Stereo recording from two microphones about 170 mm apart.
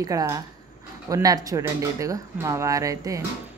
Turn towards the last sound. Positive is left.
turn(degrees=-20)  # may be behind; listen again after turning